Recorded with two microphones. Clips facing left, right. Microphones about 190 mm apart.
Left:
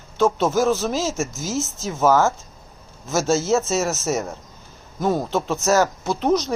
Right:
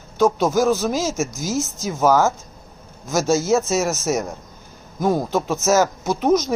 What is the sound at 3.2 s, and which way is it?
Speech, 15° right (ahead or behind).